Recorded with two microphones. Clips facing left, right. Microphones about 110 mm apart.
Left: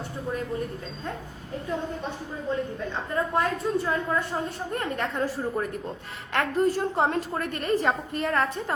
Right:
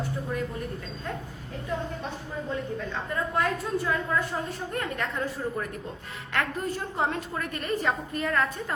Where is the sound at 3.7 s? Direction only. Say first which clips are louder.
Left 1 dB; 25° left (ahead or behind).